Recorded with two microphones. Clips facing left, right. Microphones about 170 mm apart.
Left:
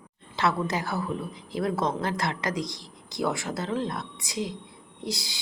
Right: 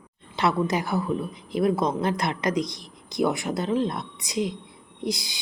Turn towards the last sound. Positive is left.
turn(degrees=-15)  # may be behind; listen again after turning